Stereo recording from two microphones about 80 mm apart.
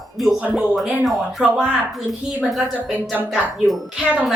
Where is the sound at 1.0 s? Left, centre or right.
Centre.